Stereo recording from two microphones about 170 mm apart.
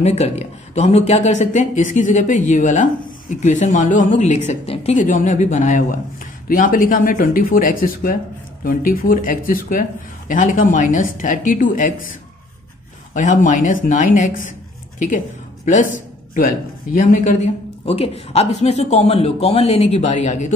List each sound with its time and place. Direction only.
0.0 s speech: 40° left (ahead or behind)